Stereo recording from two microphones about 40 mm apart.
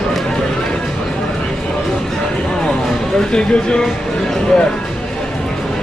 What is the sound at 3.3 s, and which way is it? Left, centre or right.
Speech, left.